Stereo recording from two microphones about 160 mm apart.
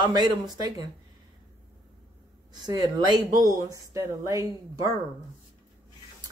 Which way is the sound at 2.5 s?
25° right (ahead or behind).